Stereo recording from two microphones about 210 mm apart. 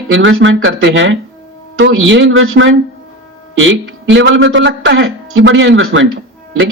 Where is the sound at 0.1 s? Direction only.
65° right (ahead or behind).